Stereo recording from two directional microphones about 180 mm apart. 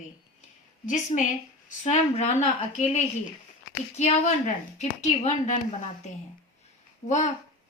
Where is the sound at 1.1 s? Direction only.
35° left (ahead or behind).